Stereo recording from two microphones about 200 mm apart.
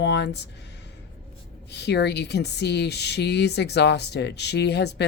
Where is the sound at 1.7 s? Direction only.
55° left (ahead or behind).